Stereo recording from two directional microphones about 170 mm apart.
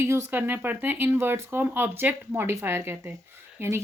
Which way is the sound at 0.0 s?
15° right (ahead or behind).